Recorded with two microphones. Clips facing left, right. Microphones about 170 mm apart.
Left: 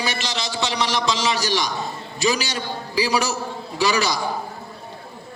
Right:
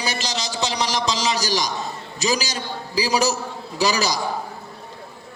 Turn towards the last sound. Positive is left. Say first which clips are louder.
# even
turn(degrees=-40)  # may be behind; listen again after turning